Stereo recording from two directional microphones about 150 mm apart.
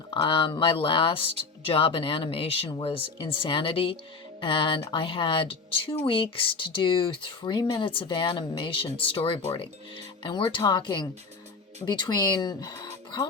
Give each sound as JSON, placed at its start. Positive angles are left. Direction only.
{"t": 0.1, "sound": "speech", "side_deg": 35}